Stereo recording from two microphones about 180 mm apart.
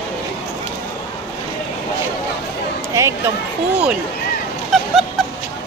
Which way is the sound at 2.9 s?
15° right (ahead or behind).